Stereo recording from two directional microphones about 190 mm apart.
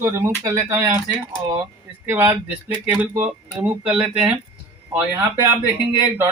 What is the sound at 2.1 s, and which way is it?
Speech, 15° right (ahead or behind).